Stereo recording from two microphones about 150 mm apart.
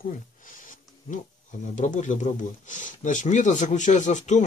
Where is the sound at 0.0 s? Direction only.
65° left (ahead or behind).